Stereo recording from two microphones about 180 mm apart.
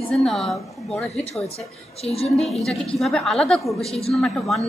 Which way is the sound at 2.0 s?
35° left (ahead or behind).